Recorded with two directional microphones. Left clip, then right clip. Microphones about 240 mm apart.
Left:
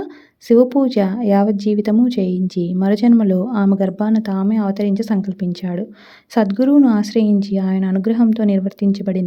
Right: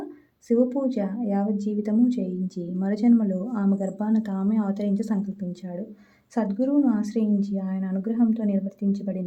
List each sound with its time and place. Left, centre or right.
0.4 s a woman's voice: left